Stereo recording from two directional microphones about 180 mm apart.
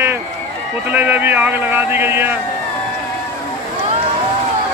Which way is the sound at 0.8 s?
10° right (ahead or behind).